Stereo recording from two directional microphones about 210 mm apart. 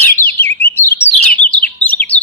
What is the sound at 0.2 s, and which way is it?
Chirp, 10° left (ahead or behind).